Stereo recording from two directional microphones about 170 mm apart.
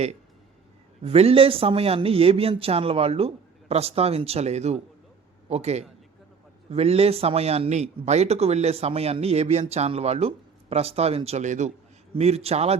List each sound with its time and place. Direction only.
1.0 s speech: 35° right (ahead or behind)